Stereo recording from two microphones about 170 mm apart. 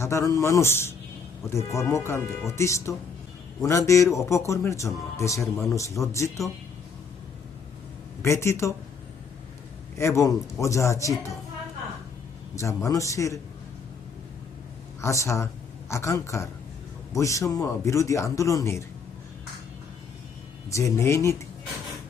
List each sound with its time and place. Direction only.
0.0 s speech: 15° left (ahead or behind)
8.2 s speech: 15° left (ahead or behind)
10.0 s speech: 15° left (ahead or behind)
12.5 s a man's voice: 20° left (ahead or behind)
15.0 s speech: 15° left (ahead or behind)
20.7 s speech: 15° left (ahead or behind)